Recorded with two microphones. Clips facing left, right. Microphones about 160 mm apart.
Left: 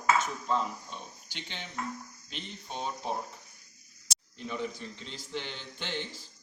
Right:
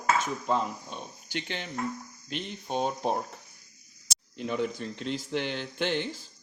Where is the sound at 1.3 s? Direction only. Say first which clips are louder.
Right 7 dB; 60° right (ahead or behind).